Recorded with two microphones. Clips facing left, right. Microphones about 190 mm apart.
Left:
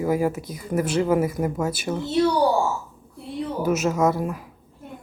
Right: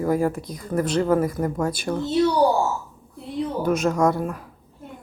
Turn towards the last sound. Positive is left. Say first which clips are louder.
# right 1 dB
turn(degrees=5)  # may be behind; listen again after turning